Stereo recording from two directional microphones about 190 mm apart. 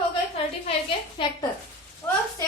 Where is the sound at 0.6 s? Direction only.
25° left (ahead or behind).